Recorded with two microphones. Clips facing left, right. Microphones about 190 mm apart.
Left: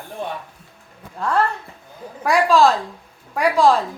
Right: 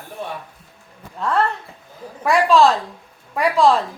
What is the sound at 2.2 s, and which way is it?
A woman's voice, centre (ahead or behind).